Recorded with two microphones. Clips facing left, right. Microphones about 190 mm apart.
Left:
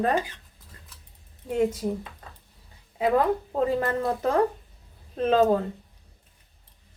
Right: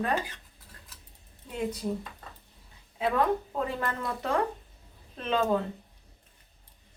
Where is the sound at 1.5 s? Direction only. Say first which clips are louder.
Left 9 dB; 45° left (ahead or behind).